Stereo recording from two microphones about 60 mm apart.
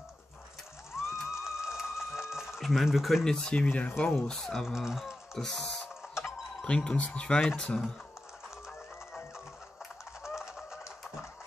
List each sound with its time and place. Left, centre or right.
1.1 s a sound: centre
3.3 s speech: centre
3.6 s speech: left
4.3 s speech: centre
4.7 s speech: centre
5.4 s speech: centre
10.2 s a sound: centre